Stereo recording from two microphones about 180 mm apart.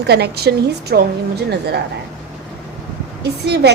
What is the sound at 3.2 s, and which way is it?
Speech, 65° right (ahead or behind).